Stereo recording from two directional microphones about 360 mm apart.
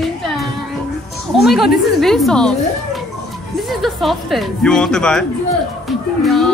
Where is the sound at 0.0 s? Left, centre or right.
Centre.